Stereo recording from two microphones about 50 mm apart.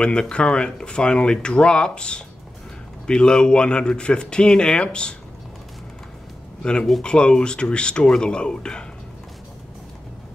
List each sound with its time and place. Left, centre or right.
0.0 s speech: centre
6.6 s speech: centre